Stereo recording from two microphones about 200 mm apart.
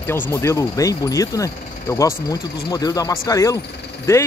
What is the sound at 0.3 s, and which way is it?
Speech, 15° left (ahead or behind).